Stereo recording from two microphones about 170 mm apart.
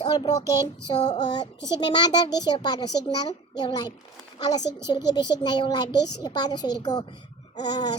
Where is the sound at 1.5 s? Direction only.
90° left.